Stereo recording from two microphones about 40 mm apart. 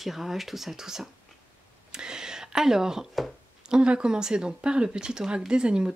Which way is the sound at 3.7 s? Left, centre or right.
Right.